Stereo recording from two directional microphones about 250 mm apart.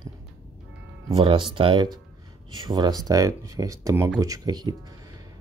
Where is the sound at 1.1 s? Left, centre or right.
Centre.